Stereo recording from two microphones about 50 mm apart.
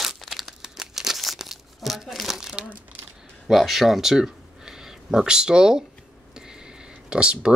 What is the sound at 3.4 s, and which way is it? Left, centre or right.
Speech, centre.